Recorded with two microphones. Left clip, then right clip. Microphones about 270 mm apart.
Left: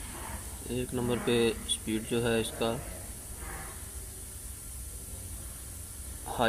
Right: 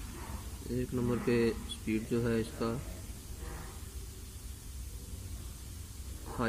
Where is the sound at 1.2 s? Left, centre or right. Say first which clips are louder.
Left 3 dB; left.